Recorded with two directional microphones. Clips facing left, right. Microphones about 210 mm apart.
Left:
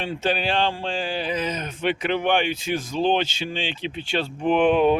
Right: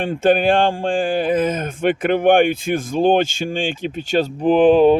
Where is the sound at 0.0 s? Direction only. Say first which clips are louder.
Right 9 dB; 50° right (ahead or behind).